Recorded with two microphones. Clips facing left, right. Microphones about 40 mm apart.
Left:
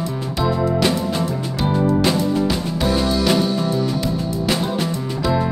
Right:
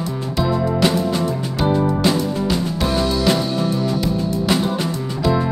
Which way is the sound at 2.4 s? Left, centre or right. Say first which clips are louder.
Even; centre.